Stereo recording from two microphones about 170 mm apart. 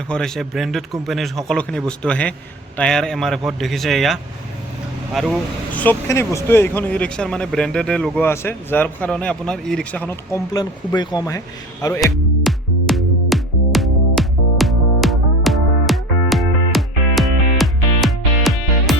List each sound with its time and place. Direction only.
0.1 s speech: 5° left (ahead or behind)
10.5 s speech: 25° left (ahead or behind)
11.9 s music: centre (ahead or behind)